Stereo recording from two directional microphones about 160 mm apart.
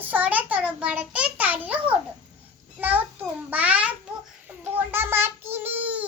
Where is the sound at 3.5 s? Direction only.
10° right (ahead or behind).